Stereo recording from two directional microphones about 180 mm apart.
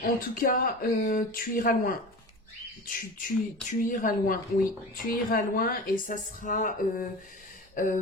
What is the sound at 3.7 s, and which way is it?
A woman's voice, 45° left (ahead or behind).